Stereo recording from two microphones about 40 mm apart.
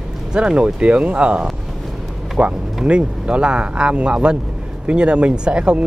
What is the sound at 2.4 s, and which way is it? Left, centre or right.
Speech, right.